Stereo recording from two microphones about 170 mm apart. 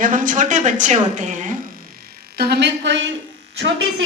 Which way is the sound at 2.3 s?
75° right (ahead or behind).